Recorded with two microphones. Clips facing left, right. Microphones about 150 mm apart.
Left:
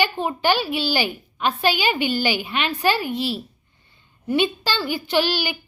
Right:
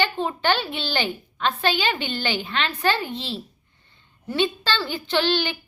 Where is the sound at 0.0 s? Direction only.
15° left (ahead or behind).